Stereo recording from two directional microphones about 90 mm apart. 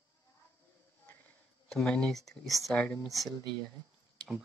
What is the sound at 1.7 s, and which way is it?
Speech, 10° left (ahead or behind).